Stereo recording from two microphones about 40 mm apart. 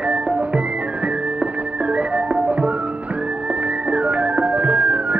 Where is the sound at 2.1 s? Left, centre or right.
Right.